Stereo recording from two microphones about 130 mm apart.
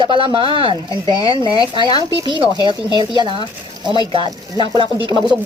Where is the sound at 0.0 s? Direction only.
35° right (ahead or behind).